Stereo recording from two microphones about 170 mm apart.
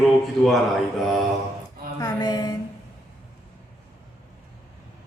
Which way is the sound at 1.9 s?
20° left (ahead or behind).